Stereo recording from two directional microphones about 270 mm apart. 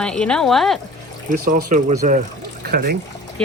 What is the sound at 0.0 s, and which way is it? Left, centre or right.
Speech, centre.